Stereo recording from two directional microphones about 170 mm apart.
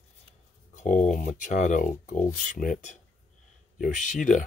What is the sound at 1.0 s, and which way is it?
Speech, 50° left (ahead or behind).